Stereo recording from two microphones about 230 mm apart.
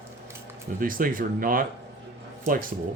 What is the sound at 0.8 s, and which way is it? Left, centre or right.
Speech, right.